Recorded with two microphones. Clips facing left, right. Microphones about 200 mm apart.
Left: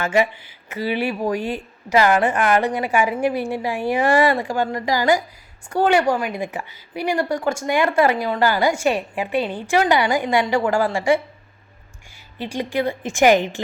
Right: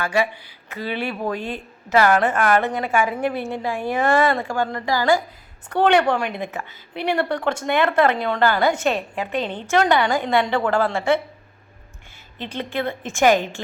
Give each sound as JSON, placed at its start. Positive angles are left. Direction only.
{"t": 0.0, "sound": "a woman's voice", "side_deg": 20}
{"t": 12.4, "sound": "a woman's voice", "side_deg": 10}